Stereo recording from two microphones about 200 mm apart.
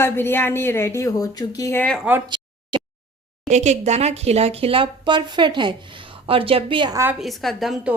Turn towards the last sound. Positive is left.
turn(degrees=0)  # may be behind; listen again after turning